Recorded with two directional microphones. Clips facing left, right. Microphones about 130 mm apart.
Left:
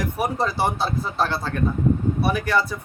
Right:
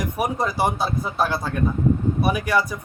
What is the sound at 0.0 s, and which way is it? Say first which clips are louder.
Speech: even; 15° right (ahead or behind).